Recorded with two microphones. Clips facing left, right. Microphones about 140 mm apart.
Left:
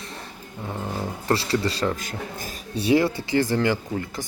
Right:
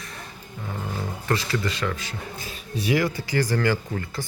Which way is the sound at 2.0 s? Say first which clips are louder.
Left 3 dB; 45° left (ahead or behind).